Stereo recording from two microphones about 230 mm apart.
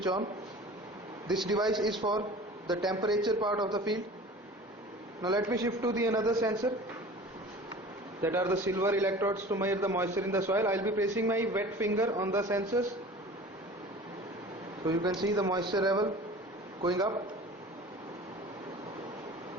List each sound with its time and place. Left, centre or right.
0.0 s a man's voice: centre
1.3 s a man's voice: centre
1.5 s a man's voice: centre
5.2 s a man's voice: centre
8.2 s a man's voice: centre
14.8 s a man's voice: centre